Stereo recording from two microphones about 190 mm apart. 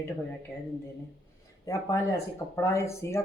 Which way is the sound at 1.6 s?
15° left (ahead or behind).